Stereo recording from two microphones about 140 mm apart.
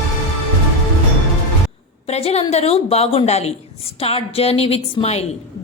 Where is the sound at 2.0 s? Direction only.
50° left (ahead or behind).